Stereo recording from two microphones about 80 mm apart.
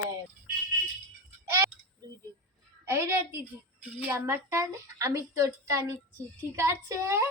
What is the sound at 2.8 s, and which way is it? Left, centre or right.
Speech, right.